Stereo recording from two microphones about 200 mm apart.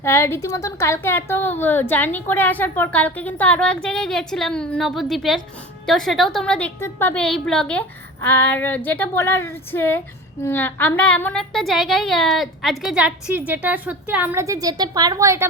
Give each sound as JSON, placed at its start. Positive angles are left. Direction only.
{"t": 0.0, "sound": "a woman's voice", "side_deg": 15}